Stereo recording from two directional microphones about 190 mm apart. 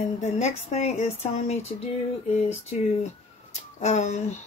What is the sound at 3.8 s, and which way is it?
Speech, 35° left (ahead or behind).